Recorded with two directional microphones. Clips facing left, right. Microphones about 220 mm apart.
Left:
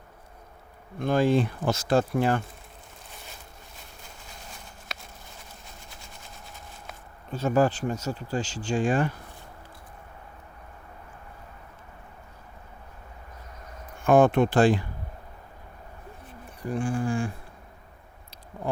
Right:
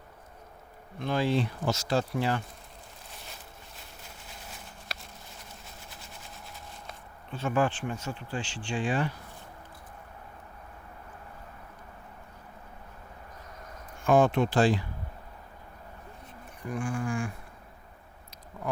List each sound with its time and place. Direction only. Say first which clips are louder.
0.9 s speech: left 5 dB; 50° left (ahead or behind)
4.9 s a sound: left 2 dB; centre (ahead or behind)
5.9 s vehicle: even; centre (ahead or behind)
7.3 s speech: left 5 dB; 40° left (ahead or behind)
14.0 s speech: left 4 dB; 55° left (ahead or behind)
16.6 s speech: left 4 dB; 30° left (ahead or behind)